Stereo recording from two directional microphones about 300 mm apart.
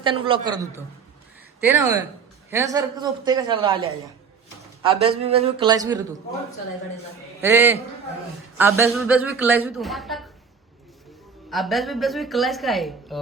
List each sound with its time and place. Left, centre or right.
0.0 s a woman's voice: centre
1.8 s a woman's voice: centre
7.4 s a woman's voice: centre
11.5 s speech: centre